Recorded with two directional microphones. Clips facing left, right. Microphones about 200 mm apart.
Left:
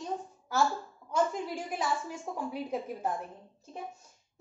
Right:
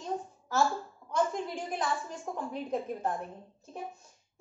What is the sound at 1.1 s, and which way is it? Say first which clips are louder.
A woman's voice: left 1 dB; 10° left (ahead or behind).